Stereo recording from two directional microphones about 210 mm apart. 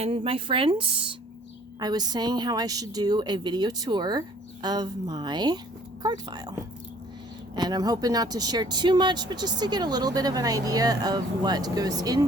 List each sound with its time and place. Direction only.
0.0 s speech: 25° right (ahead or behind)
7.5 s speech: 20° right (ahead or behind)